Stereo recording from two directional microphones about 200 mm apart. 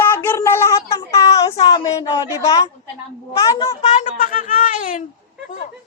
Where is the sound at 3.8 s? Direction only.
35° left (ahead or behind).